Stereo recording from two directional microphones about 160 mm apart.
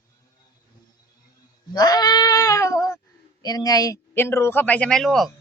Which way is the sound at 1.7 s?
25° left (ahead or behind).